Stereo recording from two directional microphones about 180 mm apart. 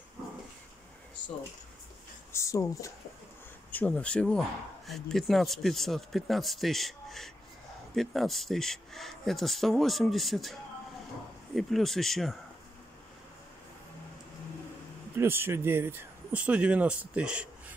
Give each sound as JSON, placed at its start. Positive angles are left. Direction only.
{"t": 2.3, "sound": "speech", "side_deg": 15}
{"t": 3.7, "sound": "speech", "side_deg": 5}
{"t": 15.1, "sound": "speech", "side_deg": -10}